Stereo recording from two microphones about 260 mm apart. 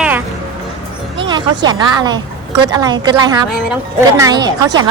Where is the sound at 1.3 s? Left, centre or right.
Centre.